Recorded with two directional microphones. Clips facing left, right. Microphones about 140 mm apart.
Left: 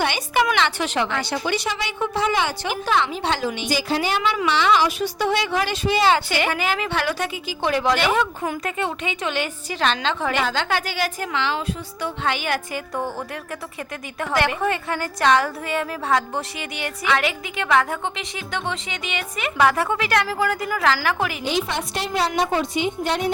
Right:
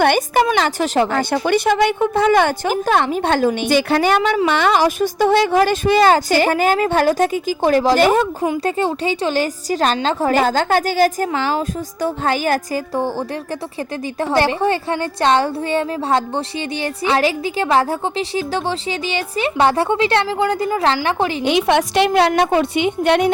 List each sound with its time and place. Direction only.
0.0 s a woman's voice: 50° right (ahead or behind); by 21.3 s 30° right (ahead or behind)
21.4 s a woman's voice: 65° right (ahead or behind)